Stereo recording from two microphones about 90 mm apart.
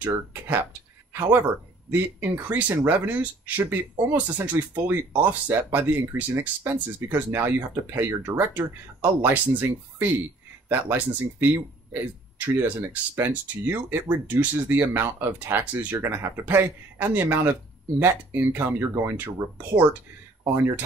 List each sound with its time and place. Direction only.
0.0 s speech: 20° right (ahead or behind)
1.9 s speech: 20° right (ahead or behind)